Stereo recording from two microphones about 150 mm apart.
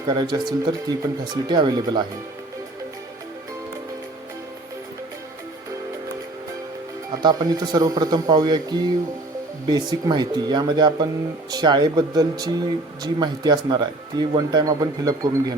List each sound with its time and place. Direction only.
0.0 s speech: 30° right (ahead or behind)
7.2 s speech: 25° right (ahead or behind)